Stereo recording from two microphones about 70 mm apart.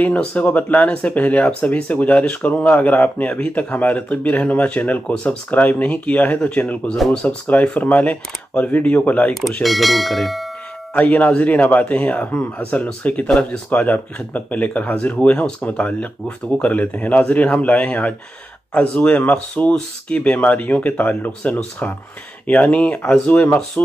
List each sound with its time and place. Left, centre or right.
0.0 s speech: left
5.1 s speech: centre
5.5 s speech: left
9.6 s speech: centre
11.0 s speech: left